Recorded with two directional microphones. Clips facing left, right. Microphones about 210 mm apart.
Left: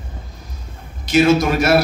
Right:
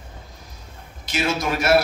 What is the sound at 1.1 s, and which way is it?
Speech, 40° left (ahead or behind).